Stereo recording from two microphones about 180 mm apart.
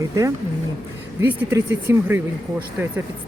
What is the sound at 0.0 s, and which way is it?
Speech, 15° right (ahead or behind).